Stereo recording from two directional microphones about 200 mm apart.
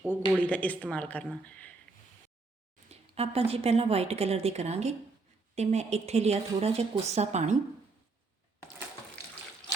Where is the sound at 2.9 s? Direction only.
30° right (ahead or behind).